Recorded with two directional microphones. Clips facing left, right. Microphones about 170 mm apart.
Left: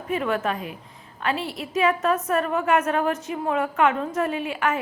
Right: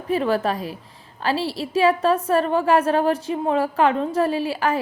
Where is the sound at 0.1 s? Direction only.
35° right (ahead or behind).